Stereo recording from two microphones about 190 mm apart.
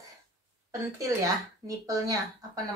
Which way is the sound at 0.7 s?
15° right (ahead or behind).